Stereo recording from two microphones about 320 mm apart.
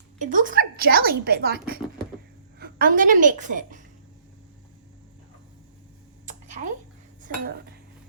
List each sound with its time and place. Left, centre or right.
0.2 s a woman's voice: right
6.2 s a sound: right
7.2 s dishes: right